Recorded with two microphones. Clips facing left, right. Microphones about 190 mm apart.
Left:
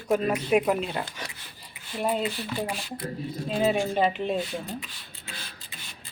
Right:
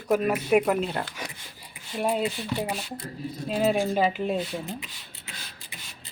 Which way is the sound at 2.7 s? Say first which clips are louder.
Even; 25° right (ahead or behind).